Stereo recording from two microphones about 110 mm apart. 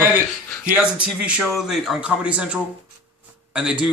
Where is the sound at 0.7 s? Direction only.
10° right (ahead or behind).